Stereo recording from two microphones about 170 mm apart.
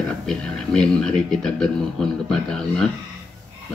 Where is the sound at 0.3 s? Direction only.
5° left (ahead or behind).